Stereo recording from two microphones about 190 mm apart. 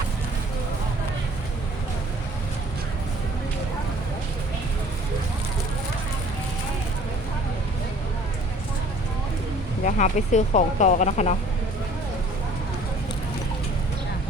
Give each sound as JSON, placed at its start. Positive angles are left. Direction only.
{"t": 9.8, "sound": "speech", "side_deg": 40}